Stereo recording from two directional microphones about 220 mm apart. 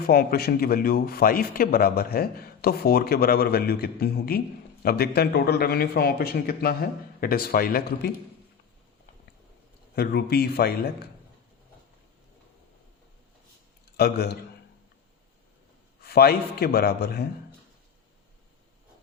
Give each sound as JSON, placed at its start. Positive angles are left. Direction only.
{"t": 0.1, "sound": "a man's voice", "side_deg": 45}
{"t": 9.9, "sound": "a man's voice", "side_deg": 45}
{"t": 13.9, "sound": "a man's voice", "side_deg": 45}
{"t": 16.0, "sound": "a man's voice", "side_deg": 45}